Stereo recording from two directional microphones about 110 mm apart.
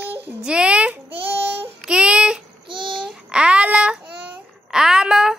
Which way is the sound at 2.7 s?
45° right (ahead or behind).